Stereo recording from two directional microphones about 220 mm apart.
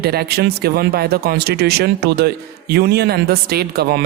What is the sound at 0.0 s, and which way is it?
A man's voice, 45° right (ahead or behind).